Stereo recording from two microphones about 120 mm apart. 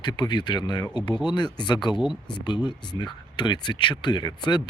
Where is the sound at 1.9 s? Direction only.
5° right (ahead or behind).